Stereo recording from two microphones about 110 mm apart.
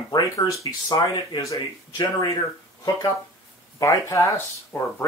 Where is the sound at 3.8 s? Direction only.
25° left (ahead or behind).